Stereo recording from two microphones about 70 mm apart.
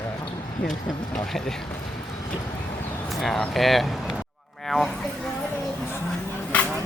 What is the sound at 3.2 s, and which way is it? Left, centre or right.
Speech, centre.